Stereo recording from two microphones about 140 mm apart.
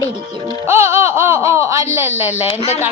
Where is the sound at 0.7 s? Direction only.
20° right (ahead or behind).